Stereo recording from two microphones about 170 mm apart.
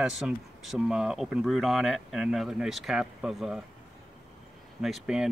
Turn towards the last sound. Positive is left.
turn(degrees=0)  # may be behind; listen again after turning